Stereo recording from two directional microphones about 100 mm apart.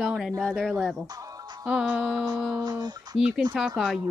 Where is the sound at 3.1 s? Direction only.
5° right (ahead or behind).